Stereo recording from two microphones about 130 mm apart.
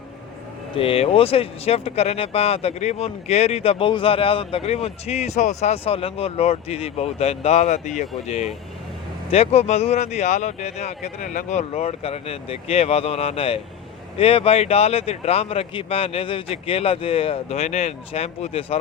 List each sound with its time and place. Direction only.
0.8 s speech: 45° left (ahead or behind); by 8.0 s 65° left (ahead or behind)
9.3 s speech: 50° left (ahead or behind)